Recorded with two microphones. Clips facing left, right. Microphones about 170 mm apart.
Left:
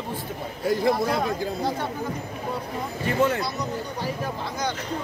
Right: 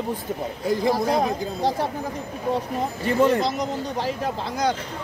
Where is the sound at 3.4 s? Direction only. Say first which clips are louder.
Right 4 dB; 90° right.